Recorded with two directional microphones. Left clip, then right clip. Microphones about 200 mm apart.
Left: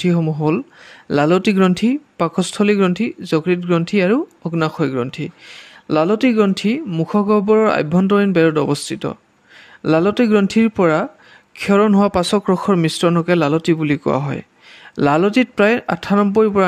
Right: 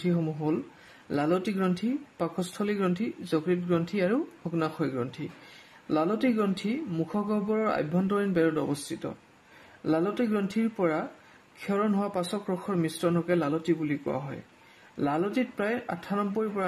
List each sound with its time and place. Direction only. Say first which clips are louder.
0.0 s speech: left 11 dB; 40° left (ahead or behind)